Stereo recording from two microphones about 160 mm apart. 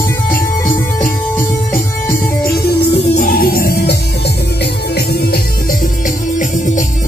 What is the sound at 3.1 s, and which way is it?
Music, 60° left (ahead or behind).